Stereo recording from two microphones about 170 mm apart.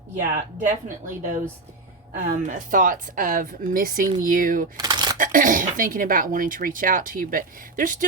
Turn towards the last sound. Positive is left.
turn(degrees=-55)  # may be behind; listen again after turning